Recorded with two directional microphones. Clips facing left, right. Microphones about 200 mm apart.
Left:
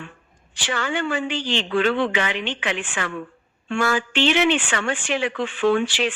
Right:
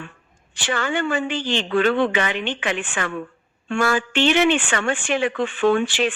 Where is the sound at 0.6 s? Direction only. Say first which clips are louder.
Right 2 dB; 50° right (ahead or behind).